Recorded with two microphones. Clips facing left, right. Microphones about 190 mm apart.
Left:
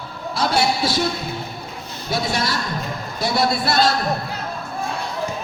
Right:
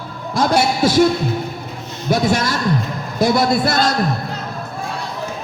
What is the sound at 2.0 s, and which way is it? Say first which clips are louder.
A man's voice: right 6 dB; 50° right (ahead or behind).